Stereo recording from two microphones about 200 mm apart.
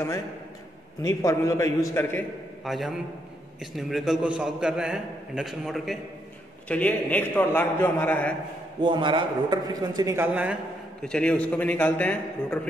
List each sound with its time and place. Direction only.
1.0 s a man's voice: 15° left (ahead or behind)
2.6 s a man's voice: centre (ahead or behind)
8.8 s a man's voice: 25° right (ahead or behind); by 12.5 s 5° left (ahead or behind)